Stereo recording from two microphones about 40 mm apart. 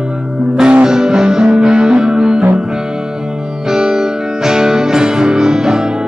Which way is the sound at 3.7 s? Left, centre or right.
Centre.